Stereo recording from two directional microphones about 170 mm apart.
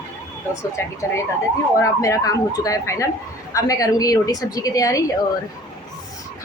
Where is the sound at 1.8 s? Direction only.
20° left (ahead or behind).